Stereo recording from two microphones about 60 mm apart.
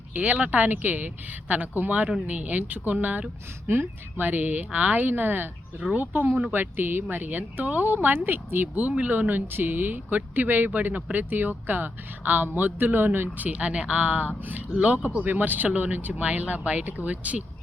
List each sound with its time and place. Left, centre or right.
0.1 s speech: right